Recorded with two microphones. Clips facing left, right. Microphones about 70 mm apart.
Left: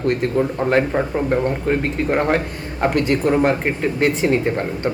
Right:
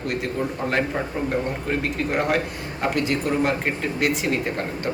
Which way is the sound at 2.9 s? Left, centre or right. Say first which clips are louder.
Left 6 dB; left.